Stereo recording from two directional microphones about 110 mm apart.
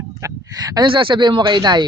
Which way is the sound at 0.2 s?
30° right (ahead or behind).